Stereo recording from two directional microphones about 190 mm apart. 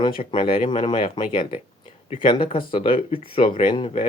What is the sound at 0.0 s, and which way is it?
Speech, 25° left (ahead or behind).